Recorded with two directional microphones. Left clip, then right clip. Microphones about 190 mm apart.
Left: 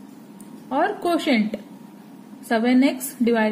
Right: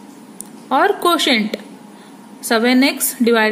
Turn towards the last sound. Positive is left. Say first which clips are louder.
# right 6 dB
turn(degrees=-20)  # may be behind; listen again after turning